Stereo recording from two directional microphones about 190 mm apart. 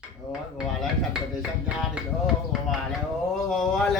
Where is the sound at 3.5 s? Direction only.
Centre (ahead or behind).